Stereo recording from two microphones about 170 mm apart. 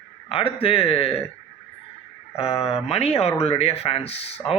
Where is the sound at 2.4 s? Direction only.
35° left (ahead or behind).